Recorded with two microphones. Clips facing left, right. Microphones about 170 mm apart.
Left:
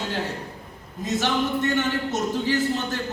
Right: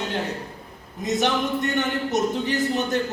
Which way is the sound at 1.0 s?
20° right (ahead or behind).